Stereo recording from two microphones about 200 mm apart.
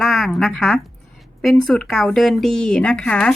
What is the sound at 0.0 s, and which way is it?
A woman's voice, centre (ahead or behind).